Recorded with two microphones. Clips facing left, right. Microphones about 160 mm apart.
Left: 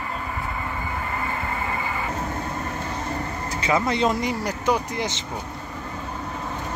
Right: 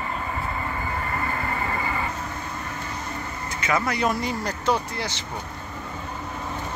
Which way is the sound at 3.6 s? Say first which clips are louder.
Left 3 dB; 25° left (ahead or behind).